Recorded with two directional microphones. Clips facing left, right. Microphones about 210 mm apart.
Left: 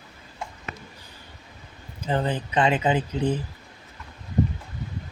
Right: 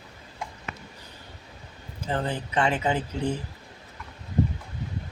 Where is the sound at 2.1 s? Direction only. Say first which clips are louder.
Left 3 dB; 20° left (ahead or behind).